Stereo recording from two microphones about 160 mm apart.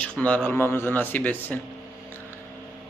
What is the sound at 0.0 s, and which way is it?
Speech, 10° left (ahead or behind).